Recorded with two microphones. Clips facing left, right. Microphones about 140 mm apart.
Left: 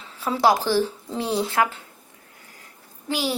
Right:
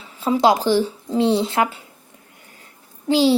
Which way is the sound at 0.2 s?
20° right (ahead or behind).